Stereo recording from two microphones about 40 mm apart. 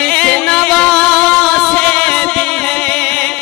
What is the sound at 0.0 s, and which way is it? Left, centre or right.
Music, centre.